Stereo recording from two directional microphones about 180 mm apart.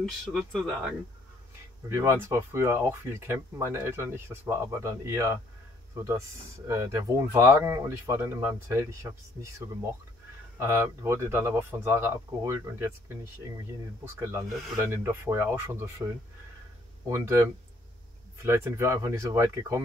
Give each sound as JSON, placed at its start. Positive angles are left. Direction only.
{"t": 0.0, "sound": "speech", "side_deg": 0}
{"t": 1.9, "sound": "speech", "side_deg": -15}
{"t": 6.7, "sound": "speech", "side_deg": -15}
{"t": 10.6, "sound": "speech", "side_deg": -15}
{"t": 17.1, "sound": "speech", "side_deg": -15}